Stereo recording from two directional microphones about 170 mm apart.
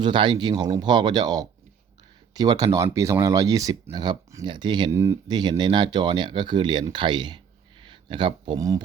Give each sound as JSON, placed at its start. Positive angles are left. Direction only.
{"t": 0.0, "sound": "speech", "side_deg": -30}